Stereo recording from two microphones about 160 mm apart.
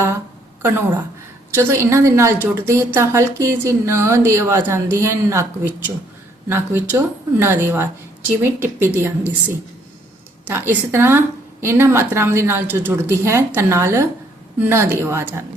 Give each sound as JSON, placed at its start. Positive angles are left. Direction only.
{"t": 0.6, "sound": "a woman's voice", "side_deg": -15}
{"t": 10.4, "sound": "a woman's voice", "side_deg": -15}